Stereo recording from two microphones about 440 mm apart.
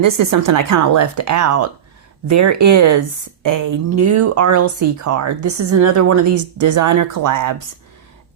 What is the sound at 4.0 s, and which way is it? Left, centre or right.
Speech, right.